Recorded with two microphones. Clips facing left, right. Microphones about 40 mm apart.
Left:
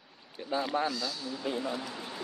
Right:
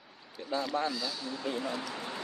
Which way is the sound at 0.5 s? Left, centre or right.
Centre.